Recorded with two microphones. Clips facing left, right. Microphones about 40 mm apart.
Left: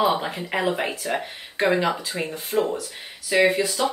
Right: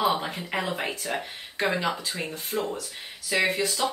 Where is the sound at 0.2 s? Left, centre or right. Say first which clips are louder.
Left 5 dB; centre.